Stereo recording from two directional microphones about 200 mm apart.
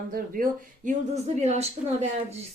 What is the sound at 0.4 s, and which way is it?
Speech, 45° right (ahead or behind).